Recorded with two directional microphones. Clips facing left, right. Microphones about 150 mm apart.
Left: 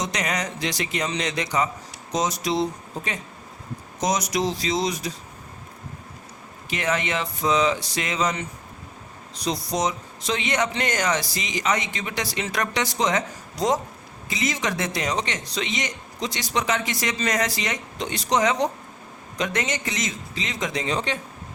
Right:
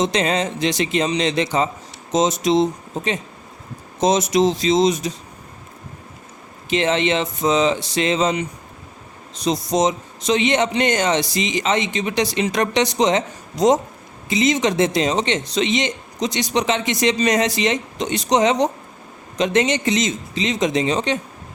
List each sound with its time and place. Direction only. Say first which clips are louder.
0.0 s a man's voice: right 8 dB; 25° right (ahead or behind)
6.7 s a man's voice: right 7 dB; 25° right (ahead or behind)